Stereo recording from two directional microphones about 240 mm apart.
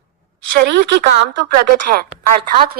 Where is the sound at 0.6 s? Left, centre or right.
Right.